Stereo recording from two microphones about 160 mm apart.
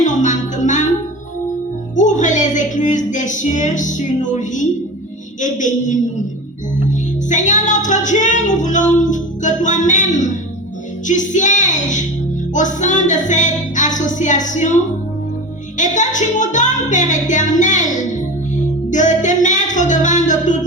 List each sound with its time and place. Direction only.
0.0 s music: 50° left (ahead or behind)
2.0 s music: 50° left (ahead or behind)
7.3 s music: 50° left (ahead or behind)
15.8 s music: 50° left (ahead or behind)